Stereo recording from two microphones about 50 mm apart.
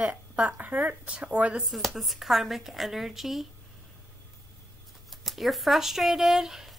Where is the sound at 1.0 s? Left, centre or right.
Right.